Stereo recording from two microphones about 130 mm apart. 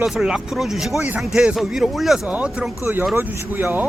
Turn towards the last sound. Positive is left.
turn(degrees=-15)  # may be behind; listen again after turning